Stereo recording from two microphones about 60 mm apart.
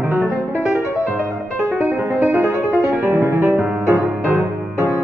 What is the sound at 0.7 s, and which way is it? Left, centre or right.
Music, right.